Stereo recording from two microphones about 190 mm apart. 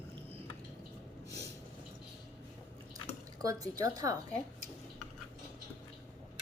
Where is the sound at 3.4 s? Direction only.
20° right (ahead or behind).